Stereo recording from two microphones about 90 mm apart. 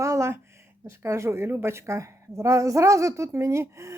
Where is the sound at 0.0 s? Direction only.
35° right (ahead or behind).